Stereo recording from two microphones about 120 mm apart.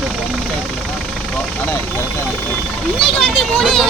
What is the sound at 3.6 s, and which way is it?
Speech, centre (ahead or behind).